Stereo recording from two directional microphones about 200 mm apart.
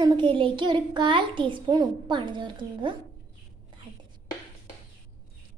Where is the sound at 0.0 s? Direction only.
25° right (ahead or behind).